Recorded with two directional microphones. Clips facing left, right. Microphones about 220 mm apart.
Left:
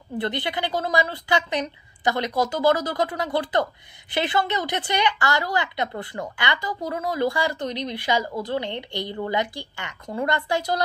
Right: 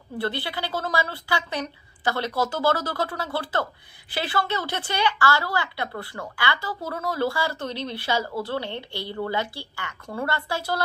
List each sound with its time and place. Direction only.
0.2 s a woman's voice: 20° left (ahead or behind)